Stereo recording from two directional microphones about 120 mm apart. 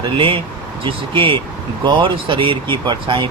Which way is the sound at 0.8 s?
45° right (ahead or behind).